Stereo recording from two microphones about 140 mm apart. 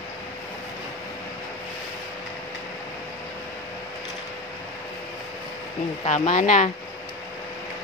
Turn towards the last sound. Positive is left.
turn(degrees=60)  # may be behind; listen again after turning